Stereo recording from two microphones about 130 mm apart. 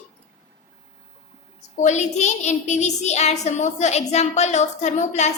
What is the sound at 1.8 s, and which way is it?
A woman's voice, 60° left (ahead or behind).